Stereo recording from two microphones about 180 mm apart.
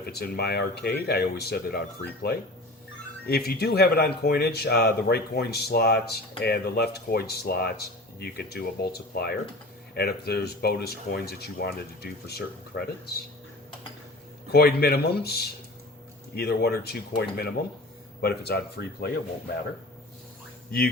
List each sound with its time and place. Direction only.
0.0 s speech: 60° left (ahead or behind)
3.2 s speech: 60° left (ahead or behind)
14.5 s speech: 60° left (ahead or behind)